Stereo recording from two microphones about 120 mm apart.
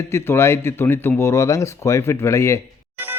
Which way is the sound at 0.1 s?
20° left (ahead or behind).